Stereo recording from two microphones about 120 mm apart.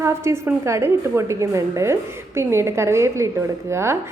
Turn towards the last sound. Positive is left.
turn(degrees=-20)  # may be behind; listen again after turning